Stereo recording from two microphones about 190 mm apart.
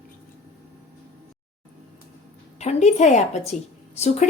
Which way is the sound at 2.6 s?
35° left (ahead or behind).